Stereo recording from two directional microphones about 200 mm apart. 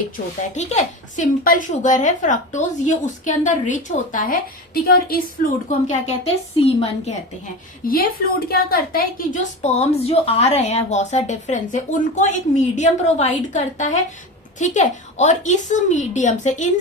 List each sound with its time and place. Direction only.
0.5 s a woman's voice: 35° left (ahead or behind)
7.9 s a woman's voice: 45° left (ahead or behind)